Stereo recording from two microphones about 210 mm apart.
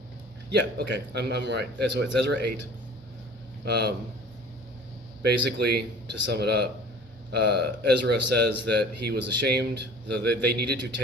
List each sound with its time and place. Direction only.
0.5 s speech: 55° right (ahead or behind)
3.7 s speech: 50° right (ahead or behind)
5.2 s speech: 50° right (ahead or behind)